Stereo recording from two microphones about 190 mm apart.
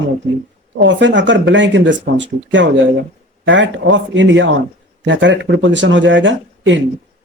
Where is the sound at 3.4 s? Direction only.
75° right (ahead or behind).